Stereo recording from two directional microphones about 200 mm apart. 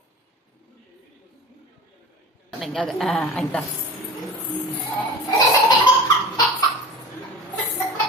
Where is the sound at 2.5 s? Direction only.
Centre (ahead or behind).